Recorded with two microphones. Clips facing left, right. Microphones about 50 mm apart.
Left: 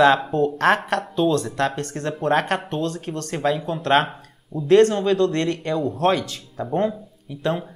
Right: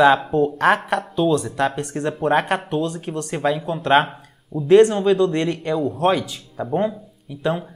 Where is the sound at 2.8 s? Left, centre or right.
Centre.